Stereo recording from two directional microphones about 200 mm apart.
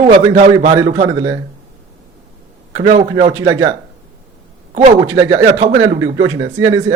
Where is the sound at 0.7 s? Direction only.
15° right (ahead or behind).